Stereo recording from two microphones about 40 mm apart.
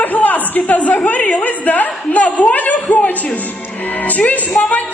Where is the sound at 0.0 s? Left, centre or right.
Left.